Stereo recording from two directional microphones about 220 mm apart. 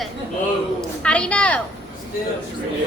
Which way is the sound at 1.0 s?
5° left (ahead or behind).